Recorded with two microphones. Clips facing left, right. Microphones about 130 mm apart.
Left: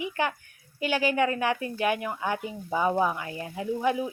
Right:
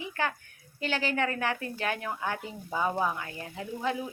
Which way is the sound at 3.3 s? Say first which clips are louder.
Left 5 dB; 25° left (ahead or behind).